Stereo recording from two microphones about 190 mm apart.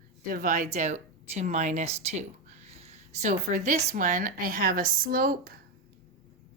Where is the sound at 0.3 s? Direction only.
45° right (ahead or behind).